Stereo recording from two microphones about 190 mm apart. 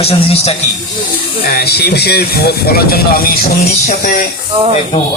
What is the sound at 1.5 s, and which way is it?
Speech, 55° left (ahead or behind).